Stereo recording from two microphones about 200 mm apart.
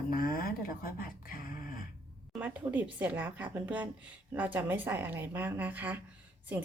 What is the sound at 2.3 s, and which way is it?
A woman's voice, 10° right (ahead or behind).